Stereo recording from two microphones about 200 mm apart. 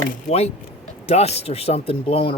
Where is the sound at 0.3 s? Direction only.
30° left (ahead or behind).